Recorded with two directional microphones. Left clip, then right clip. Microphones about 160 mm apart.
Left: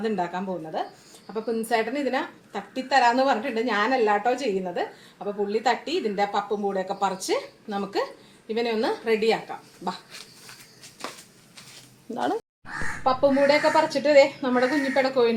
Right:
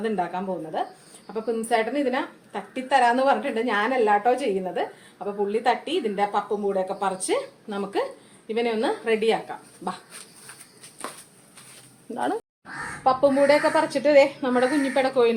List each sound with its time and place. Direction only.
0.0 s a woman's voice: 5° left (ahead or behind)
12.1 s speech: 25° left (ahead or behind)
13.1 s a woman's voice: centre (ahead or behind)